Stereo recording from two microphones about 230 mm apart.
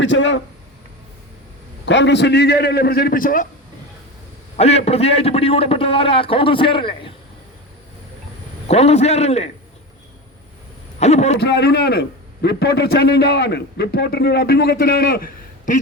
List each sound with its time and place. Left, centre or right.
0.0 s a man's voice: left
1.8 s a man's voice: left
4.5 s a man's voice: left
8.6 s a man's voice: left
11.0 s a man's voice: left
11.3 s a man's voice: left